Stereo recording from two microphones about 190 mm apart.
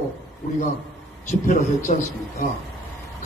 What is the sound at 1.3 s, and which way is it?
Speech, 40° left (ahead or behind).